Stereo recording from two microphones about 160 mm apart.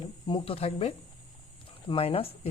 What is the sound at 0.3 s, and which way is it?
Speech, 30° left (ahead or behind).